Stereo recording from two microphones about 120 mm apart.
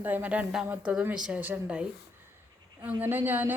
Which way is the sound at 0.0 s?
15° right (ahead or behind).